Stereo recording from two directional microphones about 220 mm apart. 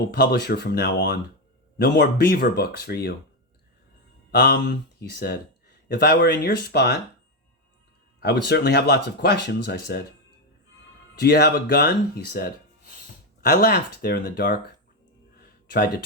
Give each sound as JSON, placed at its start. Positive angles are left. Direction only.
{"t": 0.1, "sound": "speech", "side_deg": 45}
{"t": 4.3, "sound": "speech", "side_deg": 45}
{"t": 8.2, "sound": "speech", "side_deg": 50}
{"t": 11.1, "sound": "speech", "side_deg": 45}
{"t": 15.4, "sound": "a sound", "side_deg": 45}